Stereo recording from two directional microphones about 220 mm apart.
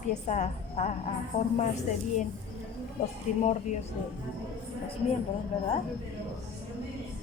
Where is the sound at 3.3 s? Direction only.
30° left (ahead or behind).